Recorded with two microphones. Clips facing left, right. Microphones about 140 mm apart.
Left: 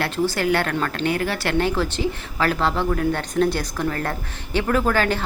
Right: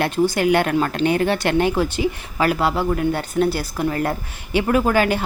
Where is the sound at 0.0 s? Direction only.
15° right (ahead or behind).